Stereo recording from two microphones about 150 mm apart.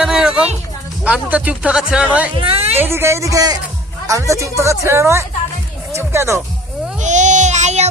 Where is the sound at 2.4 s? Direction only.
40° right (ahead or behind).